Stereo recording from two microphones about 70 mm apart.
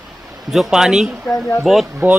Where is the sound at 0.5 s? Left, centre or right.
Centre.